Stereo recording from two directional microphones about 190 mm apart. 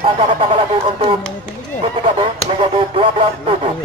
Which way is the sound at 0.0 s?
30° right (ahead or behind).